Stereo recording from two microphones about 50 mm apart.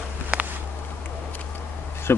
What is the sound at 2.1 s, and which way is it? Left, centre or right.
Speech, left.